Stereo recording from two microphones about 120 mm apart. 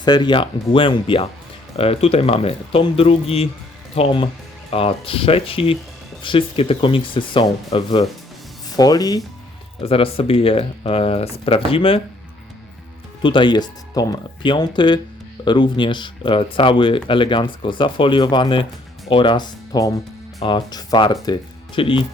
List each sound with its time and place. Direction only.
0.0 s speech: 40° left (ahead or behind)
8.7 s speech: 30° left (ahead or behind)
9.8 s speech: 50° left (ahead or behind)
13.2 s speech: 40° left (ahead or behind)